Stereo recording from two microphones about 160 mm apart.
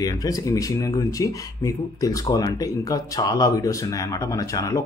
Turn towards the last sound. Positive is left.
turn(degrees=20)  # may be behind; listen again after turning